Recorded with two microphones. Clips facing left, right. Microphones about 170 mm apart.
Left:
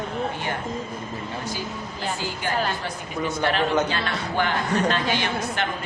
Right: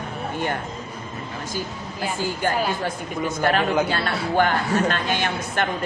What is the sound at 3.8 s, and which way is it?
A woman's voice, 45° right (ahead or behind).